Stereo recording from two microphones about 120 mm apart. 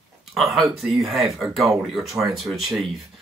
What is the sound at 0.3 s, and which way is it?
Speech, centre (ahead or behind).